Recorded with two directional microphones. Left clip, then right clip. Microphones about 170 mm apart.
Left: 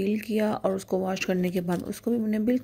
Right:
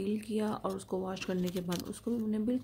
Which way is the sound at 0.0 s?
15° left (ahead or behind).